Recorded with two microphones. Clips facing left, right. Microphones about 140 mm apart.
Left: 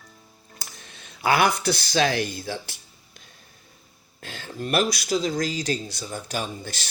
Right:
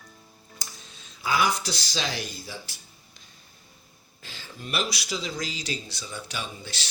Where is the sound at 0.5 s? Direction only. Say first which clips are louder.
Left 2 dB; 65° left (ahead or behind).